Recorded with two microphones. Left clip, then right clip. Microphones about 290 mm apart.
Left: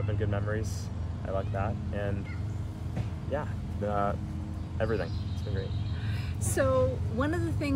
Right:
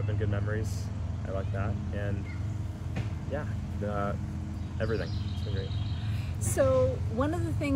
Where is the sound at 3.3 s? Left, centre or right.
Centre.